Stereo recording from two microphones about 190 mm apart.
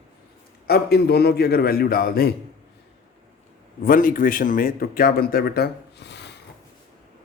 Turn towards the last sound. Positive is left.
turn(degrees=65)  # may be behind; listen again after turning